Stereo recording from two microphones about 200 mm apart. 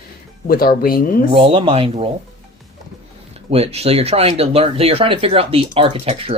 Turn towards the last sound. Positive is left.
turn(degrees=-30)  # may be behind; listen again after turning